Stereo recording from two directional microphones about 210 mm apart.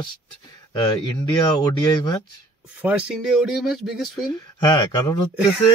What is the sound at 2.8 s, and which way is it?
Speech, 5° right (ahead or behind).